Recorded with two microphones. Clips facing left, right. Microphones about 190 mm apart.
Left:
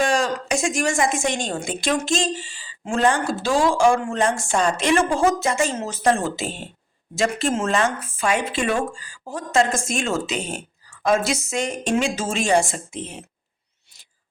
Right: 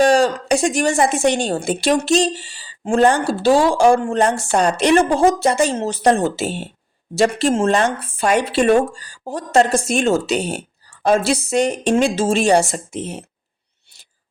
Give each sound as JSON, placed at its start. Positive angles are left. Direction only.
{"t": 0.0, "sound": "speech", "side_deg": -35}